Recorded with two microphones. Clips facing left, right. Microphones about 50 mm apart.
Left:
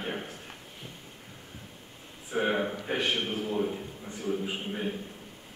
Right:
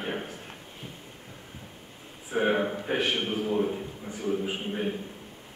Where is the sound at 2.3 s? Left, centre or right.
Centre.